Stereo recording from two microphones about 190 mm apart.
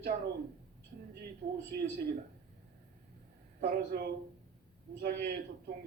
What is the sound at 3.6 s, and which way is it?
A man's voice, 55° right (ahead or behind).